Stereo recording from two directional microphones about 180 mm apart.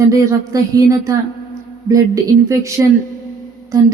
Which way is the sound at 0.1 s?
20° right (ahead or behind).